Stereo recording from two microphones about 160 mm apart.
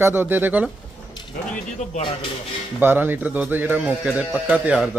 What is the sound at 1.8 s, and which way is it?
Speech, 45° left (ahead or behind).